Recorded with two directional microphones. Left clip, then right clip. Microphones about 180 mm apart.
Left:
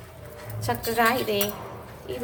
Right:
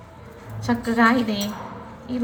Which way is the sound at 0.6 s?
45° left (ahead or behind).